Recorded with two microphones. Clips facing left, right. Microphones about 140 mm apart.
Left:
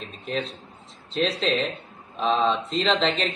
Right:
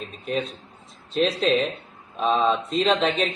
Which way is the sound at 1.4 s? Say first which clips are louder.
Right 3 dB; 10° right (ahead or behind).